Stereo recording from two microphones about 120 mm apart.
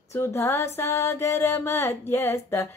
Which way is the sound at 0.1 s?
20° left (ahead or behind).